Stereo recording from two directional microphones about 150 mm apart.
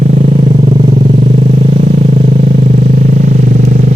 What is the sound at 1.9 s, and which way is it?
Vehicle, 60° right (ahead or behind).